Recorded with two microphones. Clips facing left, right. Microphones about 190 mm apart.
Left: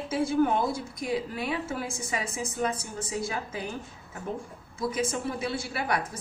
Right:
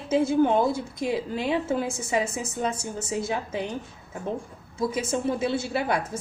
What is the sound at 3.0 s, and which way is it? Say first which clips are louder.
Speech: right 4 dB; 25° right (ahead or behind).